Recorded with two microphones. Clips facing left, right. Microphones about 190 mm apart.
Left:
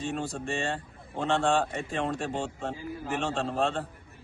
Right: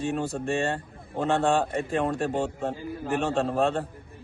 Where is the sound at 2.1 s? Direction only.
60° right (ahead or behind).